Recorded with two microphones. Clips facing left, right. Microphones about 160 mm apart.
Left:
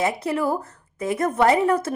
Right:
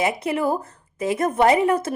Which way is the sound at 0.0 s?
20° right (ahead or behind).